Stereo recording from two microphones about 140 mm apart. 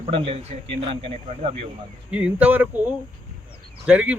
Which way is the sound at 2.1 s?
10° right (ahead or behind).